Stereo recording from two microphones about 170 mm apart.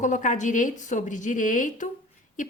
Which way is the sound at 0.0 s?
45° left (ahead or behind).